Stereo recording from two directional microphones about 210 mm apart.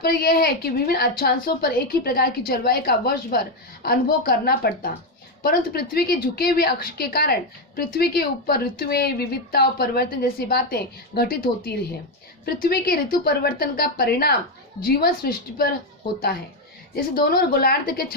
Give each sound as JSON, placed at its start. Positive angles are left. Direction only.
{"t": 0.0, "sound": "a woman's voice", "side_deg": 45}
{"t": 16.9, "sound": "a woman's voice", "side_deg": 45}